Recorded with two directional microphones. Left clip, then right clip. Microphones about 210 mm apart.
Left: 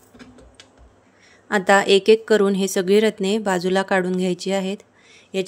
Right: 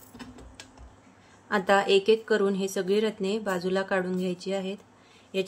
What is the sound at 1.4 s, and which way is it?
Speech, 35° left (ahead or behind).